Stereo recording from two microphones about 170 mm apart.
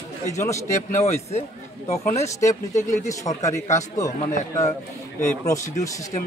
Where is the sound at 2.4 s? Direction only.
45° left (ahead or behind).